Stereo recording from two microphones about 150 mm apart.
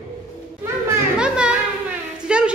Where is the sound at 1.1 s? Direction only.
5° right (ahead or behind).